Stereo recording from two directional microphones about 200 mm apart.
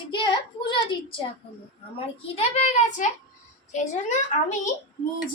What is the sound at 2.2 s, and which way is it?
A child's voice, 30° left (ahead or behind).